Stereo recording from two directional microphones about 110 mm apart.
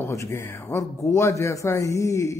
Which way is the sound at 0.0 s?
25° left (ahead or behind).